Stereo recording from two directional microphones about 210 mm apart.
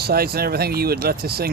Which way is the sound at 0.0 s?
50° right (ahead or behind).